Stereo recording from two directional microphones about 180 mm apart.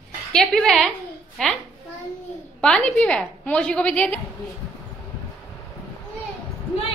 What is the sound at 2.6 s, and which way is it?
A woman's voice, 5° left (ahead or behind).